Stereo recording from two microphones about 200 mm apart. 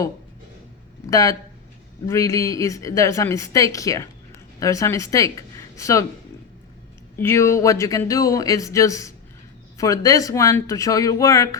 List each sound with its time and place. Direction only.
1.0 s a woman's voice: 15° left (ahead or behind)
7.2 s a woman's voice: 10° left (ahead or behind)